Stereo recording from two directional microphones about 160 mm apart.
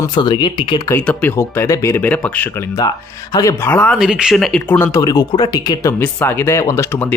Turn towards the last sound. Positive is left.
turn(degrees=15)  # may be behind; listen again after turning